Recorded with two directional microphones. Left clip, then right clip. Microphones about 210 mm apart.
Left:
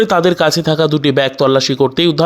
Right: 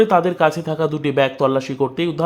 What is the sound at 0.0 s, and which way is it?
Speech, 25° left (ahead or behind).